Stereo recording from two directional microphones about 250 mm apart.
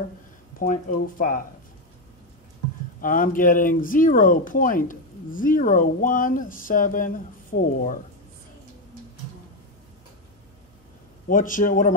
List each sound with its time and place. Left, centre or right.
0.6 s speech: left
3.0 s speech: left
11.2 s speech: left